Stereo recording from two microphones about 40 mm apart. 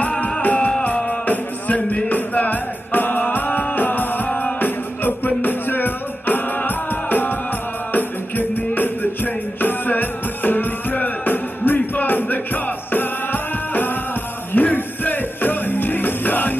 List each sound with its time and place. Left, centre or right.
0.4 s music: left
4.3 s music: left
4.6 s music: left